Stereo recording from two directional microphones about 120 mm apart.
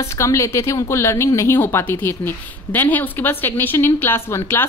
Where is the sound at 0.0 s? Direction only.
25° left (ahead or behind).